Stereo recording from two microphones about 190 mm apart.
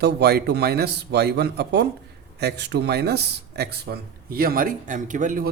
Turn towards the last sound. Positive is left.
turn(degrees=-40)  # may be behind; listen again after turning